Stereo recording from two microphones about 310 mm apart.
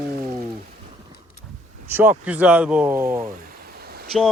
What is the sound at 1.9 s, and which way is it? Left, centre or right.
Speech, centre.